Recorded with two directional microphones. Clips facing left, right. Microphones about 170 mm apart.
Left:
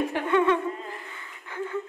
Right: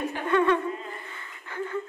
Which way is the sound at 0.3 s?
15° left (ahead or behind).